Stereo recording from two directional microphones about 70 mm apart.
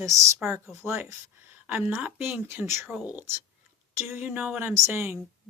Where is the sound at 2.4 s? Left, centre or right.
Right.